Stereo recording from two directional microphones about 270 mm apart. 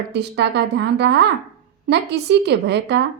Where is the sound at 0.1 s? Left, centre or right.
Right.